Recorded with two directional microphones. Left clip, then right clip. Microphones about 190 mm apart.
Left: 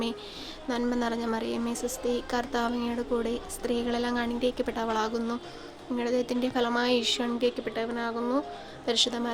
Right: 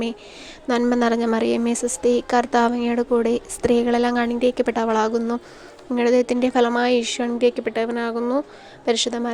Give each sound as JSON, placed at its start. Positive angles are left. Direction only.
{"t": 0.7, "sound": "a woman's voice", "side_deg": -50}